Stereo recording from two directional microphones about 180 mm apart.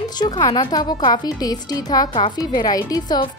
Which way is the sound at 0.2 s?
25° left (ahead or behind).